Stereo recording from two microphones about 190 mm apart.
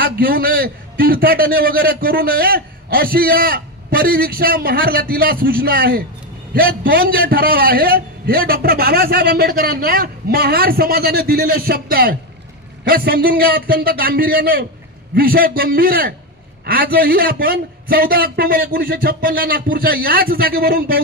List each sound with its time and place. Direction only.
0.0 s a man's voice: 50° right (ahead or behind)